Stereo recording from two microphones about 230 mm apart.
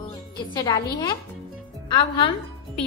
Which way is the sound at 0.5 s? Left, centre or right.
Centre.